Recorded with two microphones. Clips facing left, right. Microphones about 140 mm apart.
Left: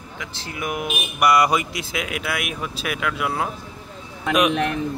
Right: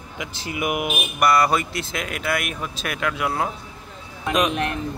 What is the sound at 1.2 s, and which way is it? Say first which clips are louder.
Speech: left 1 dB; 15° left (ahead or behind).